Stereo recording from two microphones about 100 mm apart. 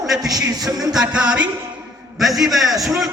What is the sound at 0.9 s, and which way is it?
A man's voice, 10° right (ahead or behind).